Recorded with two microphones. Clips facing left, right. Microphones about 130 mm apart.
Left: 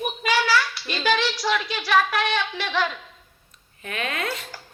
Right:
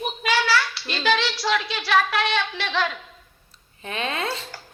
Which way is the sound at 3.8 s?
30° right (ahead or behind).